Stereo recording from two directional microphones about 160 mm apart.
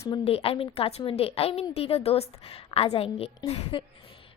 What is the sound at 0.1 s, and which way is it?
A woman's voice, 35° left (ahead or behind).